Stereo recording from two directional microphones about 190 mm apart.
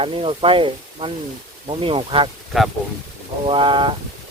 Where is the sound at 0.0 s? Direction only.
30° right (ahead or behind).